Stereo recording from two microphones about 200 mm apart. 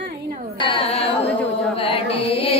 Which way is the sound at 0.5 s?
25° left (ahead or behind).